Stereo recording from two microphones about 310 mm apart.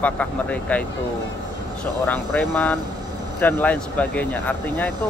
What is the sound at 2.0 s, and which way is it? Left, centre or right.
Speech, centre.